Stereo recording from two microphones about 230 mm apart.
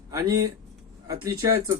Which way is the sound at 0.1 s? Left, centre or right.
Centre.